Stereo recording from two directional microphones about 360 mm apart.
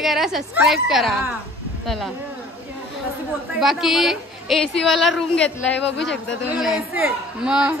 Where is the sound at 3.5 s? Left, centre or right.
Centre.